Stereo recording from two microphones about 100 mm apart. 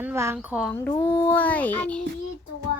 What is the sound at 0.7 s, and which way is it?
Speech, 20° left (ahead or behind).